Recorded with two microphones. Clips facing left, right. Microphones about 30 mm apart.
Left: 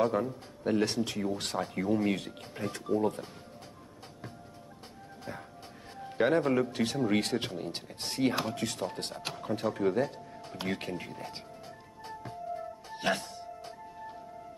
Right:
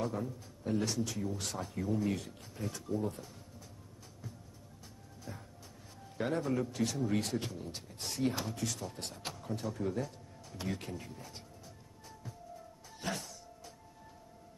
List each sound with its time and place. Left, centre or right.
0.0 s a man's voice: left
5.9 s a man's voice: left
12.0 s music: left